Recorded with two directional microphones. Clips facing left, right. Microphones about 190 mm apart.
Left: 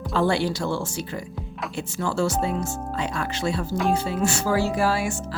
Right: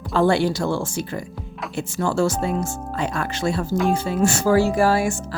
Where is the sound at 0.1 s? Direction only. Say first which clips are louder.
Right 4 dB; 50° right (ahead or behind).